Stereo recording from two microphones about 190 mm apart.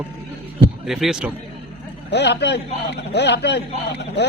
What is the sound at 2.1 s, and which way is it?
A man's voice, 65° left (ahead or behind).